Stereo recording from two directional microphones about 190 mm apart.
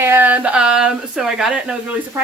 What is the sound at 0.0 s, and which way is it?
Speech, 10° right (ahead or behind).